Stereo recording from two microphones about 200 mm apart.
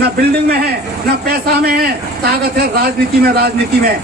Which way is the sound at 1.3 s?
50° right (ahead or behind).